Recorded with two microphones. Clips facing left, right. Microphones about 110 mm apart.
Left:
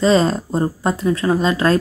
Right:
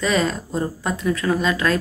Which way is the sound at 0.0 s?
30° left (ahead or behind).